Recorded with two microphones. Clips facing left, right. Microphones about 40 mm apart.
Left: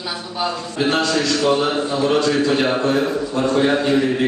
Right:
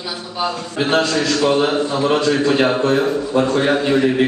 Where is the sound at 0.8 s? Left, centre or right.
Right.